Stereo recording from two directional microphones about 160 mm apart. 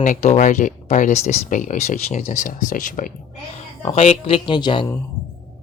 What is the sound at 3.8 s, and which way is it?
Speech, 45° left (ahead or behind).